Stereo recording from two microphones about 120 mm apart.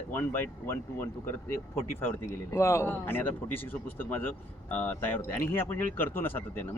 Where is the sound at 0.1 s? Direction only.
20° left (ahead or behind).